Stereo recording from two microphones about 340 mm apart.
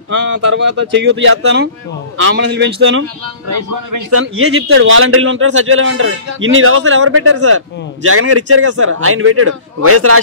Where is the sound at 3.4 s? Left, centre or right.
Right.